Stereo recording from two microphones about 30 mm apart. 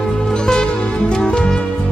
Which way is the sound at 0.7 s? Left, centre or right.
Left.